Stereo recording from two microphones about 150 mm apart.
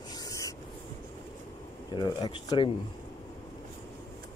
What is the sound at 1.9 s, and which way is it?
Speech, 30° left (ahead or behind).